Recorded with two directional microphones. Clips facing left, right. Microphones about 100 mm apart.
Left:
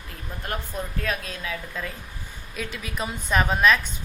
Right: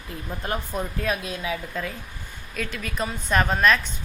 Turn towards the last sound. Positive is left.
turn(degrees=5)  # may be behind; listen again after turning